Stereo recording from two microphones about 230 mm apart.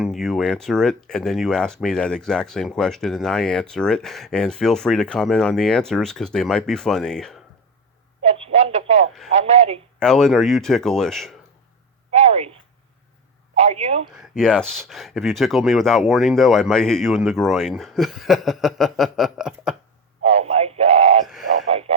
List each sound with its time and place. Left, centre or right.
0.0 s speech: centre
8.2 s radio: right
10.0 s speech: centre
12.1 s a sound: right
13.6 s speech: right
14.2 s speech: centre
20.2 s radio: right
21.2 s radio: centre
21.7 s a sound: right